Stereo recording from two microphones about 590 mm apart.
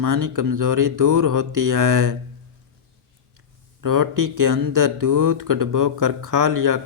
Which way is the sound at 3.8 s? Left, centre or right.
Right.